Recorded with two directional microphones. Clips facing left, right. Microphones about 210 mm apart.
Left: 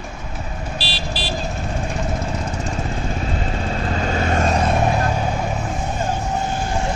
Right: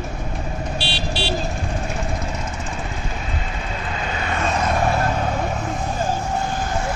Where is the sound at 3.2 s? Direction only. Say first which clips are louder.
Left 5 dB; 35° left (ahead or behind).